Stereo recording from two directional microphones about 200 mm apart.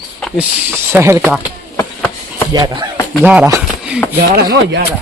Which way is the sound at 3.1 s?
5° right (ahead or behind).